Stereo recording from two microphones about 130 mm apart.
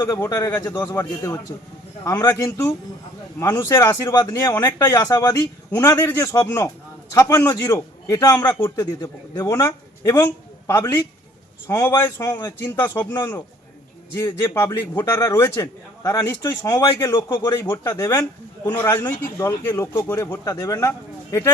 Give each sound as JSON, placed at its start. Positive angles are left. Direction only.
{"t": 0.0, "sound": "a man's voice", "side_deg": 25}
{"t": 17.1, "sound": "speech", "side_deg": 35}
{"t": 17.6, "sound": "a man's voice", "side_deg": 20}